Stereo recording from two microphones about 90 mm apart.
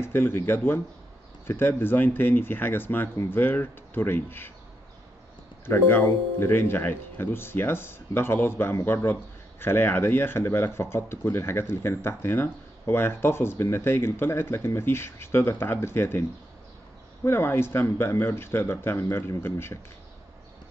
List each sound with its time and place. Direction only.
0.0 s speech: 25° left (ahead or behind)
5.7 s speech: 25° left (ahead or behind)